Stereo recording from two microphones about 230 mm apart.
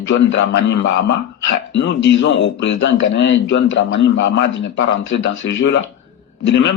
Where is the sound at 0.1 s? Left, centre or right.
Left.